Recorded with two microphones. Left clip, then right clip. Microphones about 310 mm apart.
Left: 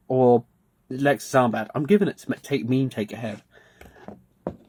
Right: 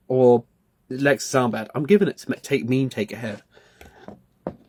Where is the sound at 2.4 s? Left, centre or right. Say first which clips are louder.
Right 2 dB; centre.